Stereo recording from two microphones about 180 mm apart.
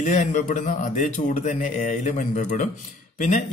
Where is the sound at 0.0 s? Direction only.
45° left (ahead or behind).